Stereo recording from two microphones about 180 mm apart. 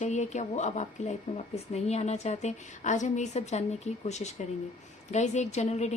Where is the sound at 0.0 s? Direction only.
40° left (ahead or behind).